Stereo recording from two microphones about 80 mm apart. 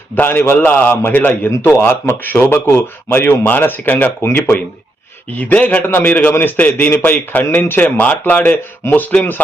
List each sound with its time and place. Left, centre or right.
0.2 s speech: left
1.5 s a man's voice: left
5.3 s speech: centre